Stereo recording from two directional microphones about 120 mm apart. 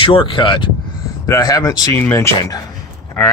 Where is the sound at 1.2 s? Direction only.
25° left (ahead or behind).